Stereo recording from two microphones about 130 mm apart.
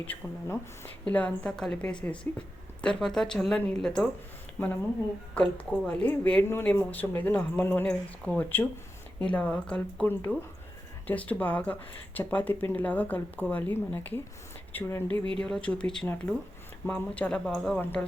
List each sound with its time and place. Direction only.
0.0 s a woman's voice: 15° left (ahead or behind)
5.3 s a woman's voice: 10° left (ahead or behind)